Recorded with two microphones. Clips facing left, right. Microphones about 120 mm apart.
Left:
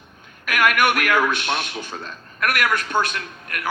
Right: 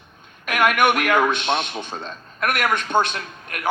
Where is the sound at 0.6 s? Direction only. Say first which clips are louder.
Right 1 dB; 20° right (ahead or behind).